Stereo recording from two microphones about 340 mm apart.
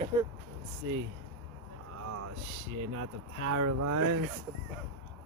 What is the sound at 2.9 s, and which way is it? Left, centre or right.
Speech, right.